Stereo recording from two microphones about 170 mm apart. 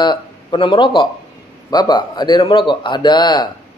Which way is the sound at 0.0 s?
25° left (ahead or behind).